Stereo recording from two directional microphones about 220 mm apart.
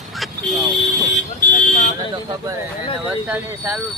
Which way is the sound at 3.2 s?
5° right (ahead or behind).